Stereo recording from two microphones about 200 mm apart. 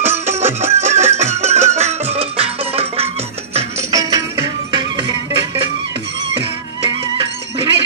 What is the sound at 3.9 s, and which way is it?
Music, 15° right (ahead or behind).